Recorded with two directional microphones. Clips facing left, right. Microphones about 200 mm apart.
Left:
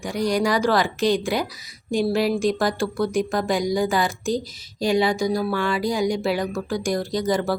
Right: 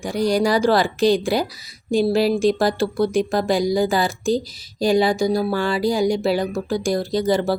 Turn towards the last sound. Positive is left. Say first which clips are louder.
# right 3 dB
turn(degrees=-30)  # may be behind; listen again after turning